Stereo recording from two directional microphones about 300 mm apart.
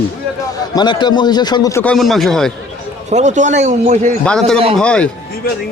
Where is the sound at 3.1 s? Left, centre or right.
Right.